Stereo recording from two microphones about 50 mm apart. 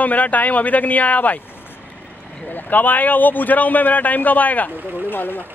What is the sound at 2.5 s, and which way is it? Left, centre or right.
Speech, left.